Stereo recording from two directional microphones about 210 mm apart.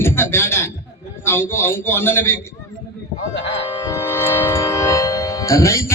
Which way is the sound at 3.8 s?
15° left (ahead or behind).